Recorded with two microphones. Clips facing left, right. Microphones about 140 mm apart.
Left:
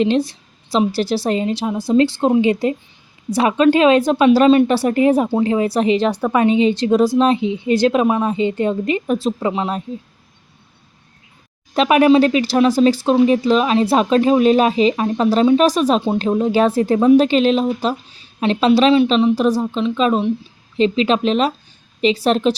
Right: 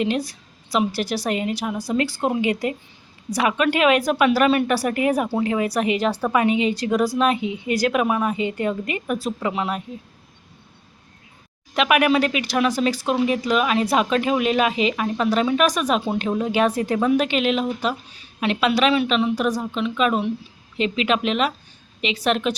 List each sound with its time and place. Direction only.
0.0 s speech: 25° left (ahead or behind)
6.1 s a woman's voice: 15° left (ahead or behind)
6.3 s speech: 30° left (ahead or behind)
11.7 s speech: 30° left (ahead or behind)